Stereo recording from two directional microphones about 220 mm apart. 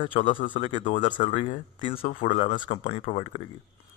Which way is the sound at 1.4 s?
25° left (ahead or behind).